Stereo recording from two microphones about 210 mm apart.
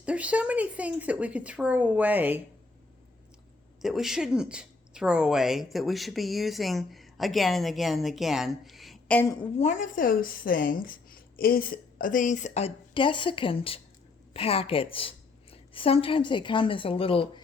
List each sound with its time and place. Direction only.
0.0 s speech: 5° right (ahead or behind)
3.8 s a woman's voice: centre (ahead or behind)
9.6 s a woman's voice: 35° left (ahead or behind)